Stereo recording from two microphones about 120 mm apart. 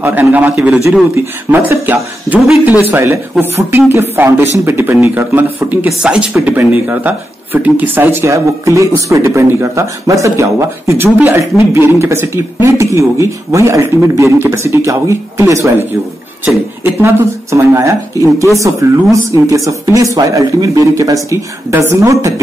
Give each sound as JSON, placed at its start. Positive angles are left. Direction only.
{"t": 0.0, "sound": "a man's voice", "side_deg": -15}